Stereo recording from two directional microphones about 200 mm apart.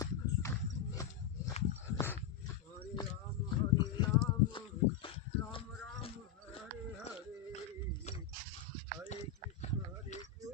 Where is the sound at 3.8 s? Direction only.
25° left (ahead or behind).